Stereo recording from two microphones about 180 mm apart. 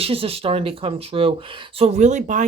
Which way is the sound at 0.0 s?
30° right (ahead or behind).